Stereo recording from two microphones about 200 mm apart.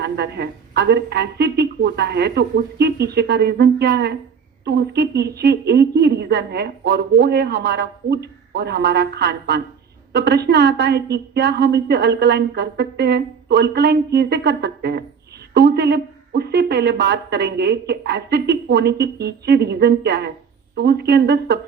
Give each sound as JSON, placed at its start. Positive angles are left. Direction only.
{"t": 0.0, "sound": "a woman's voice", "side_deg": -55}